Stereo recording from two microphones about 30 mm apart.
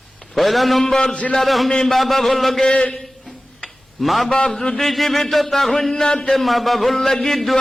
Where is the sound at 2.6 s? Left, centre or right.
Left.